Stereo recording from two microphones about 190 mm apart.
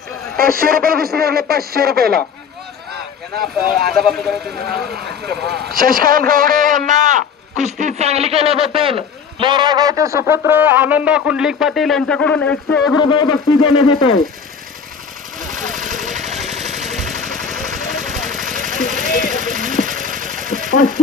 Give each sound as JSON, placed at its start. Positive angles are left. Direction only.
{"t": 0.4, "sound": "a man's voice", "side_deg": -50}
{"t": 4.9, "sound": "a man's voice", "side_deg": -60}
{"t": 13.0, "sound": "speech", "side_deg": 20}
{"t": 13.7, "sound": "speech", "side_deg": 90}
{"t": 15.3, "sound": "a sound", "side_deg": -45}
{"t": 19.3, "sound": "sewing machine", "side_deg": -45}